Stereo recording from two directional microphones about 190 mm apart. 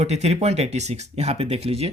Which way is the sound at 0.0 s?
35° right (ahead or behind).